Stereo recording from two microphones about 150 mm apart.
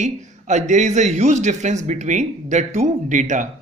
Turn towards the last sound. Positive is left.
turn(degrees=-55)  # may be behind; listen again after turning